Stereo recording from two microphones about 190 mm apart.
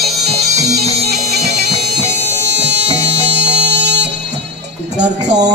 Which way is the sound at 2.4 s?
65° right (ahead or behind).